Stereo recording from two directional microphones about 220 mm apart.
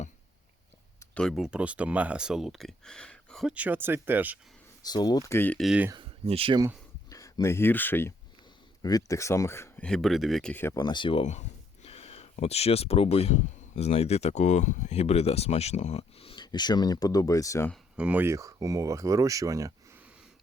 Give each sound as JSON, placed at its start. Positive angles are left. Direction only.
{"t": 1.1, "sound": "speech", "side_deg": 0}
{"t": 4.9, "sound": "speech", "side_deg": 20}
{"t": 5.9, "sound": "speech", "side_deg": -25}
{"t": 7.1, "sound": "speech", "side_deg": 15}
{"t": 17.9, "sound": "speech", "side_deg": -5}